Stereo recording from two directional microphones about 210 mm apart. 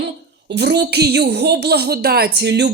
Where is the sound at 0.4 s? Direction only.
55° right (ahead or behind).